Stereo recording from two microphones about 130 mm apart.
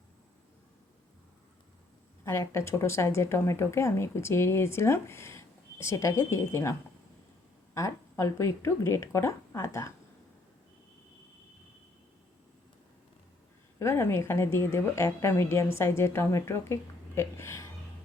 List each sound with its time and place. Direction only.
2.2 s speech: 20° left (ahead or behind)
13.7 s speech: 20° left (ahead or behind)